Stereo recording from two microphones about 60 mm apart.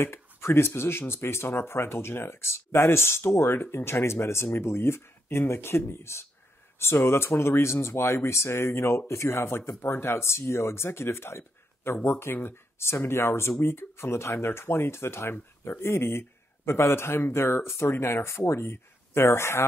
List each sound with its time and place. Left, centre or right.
0.0 s speech: left